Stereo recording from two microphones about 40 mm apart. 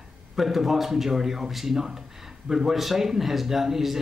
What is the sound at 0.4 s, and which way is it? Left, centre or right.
A man's voice, centre.